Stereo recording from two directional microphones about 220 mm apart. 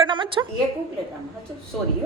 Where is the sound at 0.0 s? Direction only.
20° right (ahead or behind).